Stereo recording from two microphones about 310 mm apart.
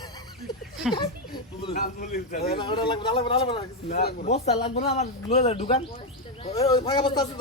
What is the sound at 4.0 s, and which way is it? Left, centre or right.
Speech, left.